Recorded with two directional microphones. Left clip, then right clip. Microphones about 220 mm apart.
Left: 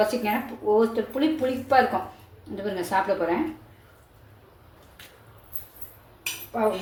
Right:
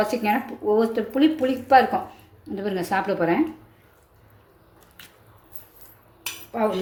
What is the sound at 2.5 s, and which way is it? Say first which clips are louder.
Speech: right 1 dB; 35° right (ahead or behind).